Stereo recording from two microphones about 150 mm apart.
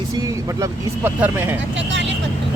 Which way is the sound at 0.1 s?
20° right (ahead or behind).